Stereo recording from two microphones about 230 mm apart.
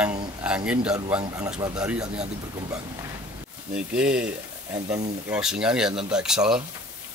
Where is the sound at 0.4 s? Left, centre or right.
Centre.